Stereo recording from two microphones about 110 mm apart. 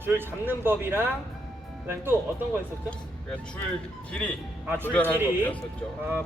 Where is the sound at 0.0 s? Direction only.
20° right (ahead or behind).